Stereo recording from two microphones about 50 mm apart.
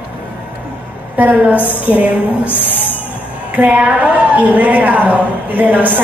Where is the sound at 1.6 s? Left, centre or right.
Left.